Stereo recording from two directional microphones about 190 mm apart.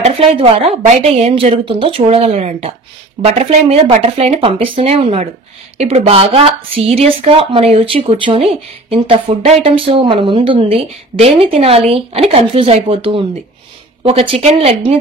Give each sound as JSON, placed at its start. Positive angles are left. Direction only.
{"t": 0.0, "sound": "a woman's voice", "side_deg": -30}